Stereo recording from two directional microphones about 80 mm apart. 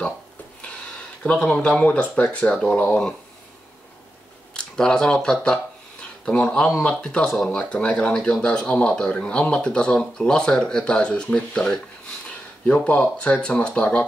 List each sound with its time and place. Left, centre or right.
0.6 s speech: centre
4.6 s speech: centre